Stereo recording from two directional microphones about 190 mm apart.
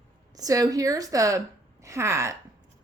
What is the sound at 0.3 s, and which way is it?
Speech, 20° right (ahead or behind).